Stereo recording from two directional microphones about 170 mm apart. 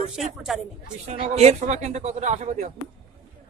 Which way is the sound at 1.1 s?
40° right (ahead or behind).